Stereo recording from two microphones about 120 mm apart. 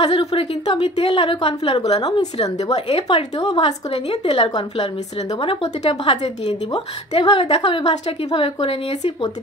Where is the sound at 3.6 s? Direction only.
60° left (ahead or behind).